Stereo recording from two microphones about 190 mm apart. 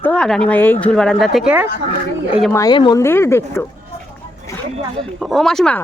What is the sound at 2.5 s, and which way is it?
Speech, 20° left (ahead or behind).